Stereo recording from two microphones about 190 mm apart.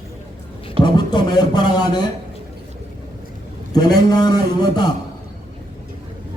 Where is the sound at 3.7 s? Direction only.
20° left (ahead or behind).